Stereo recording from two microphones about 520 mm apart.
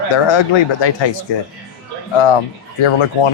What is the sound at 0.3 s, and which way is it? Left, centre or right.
Speech, left.